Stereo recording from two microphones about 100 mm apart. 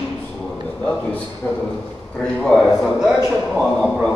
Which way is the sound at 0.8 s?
15° left (ahead or behind).